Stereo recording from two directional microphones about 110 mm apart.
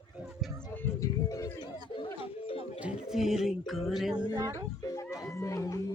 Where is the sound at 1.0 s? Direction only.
30° left (ahead or behind).